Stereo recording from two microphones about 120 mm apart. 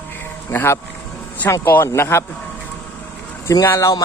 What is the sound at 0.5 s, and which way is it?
Speech, 20° left (ahead or behind).